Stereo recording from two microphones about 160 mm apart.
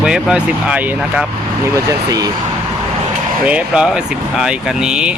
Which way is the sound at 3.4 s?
5° right (ahead or behind).